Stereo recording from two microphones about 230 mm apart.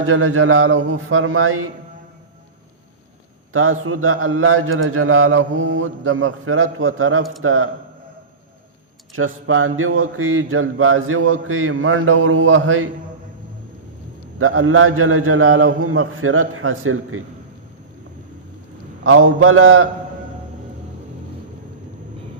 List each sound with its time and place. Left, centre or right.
0.0 s mantra: right
3.5 s mantra: right
9.1 s mantra: right
14.3 s mantra: right
19.0 s mantra: right